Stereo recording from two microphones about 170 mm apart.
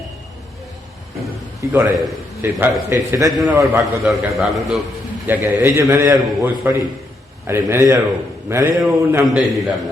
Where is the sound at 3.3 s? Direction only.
Centre (ahead or behind).